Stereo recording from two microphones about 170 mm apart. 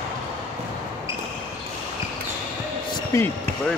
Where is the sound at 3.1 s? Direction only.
20° left (ahead or behind).